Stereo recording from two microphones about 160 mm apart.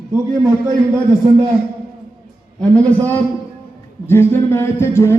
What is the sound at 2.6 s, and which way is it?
Speech, 10° left (ahead or behind).